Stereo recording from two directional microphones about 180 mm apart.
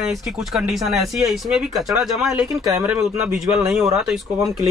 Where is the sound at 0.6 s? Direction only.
Centre (ahead or behind).